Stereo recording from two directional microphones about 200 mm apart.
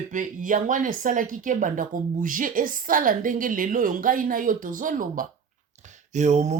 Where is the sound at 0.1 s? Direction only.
40° right (ahead or behind).